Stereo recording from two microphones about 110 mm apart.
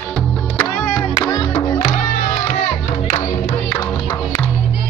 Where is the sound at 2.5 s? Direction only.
80° left.